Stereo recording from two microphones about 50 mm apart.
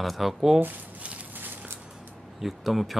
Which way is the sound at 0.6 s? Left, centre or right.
Right.